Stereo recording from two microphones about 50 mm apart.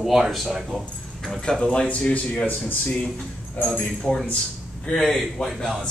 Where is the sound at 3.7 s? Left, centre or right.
Left.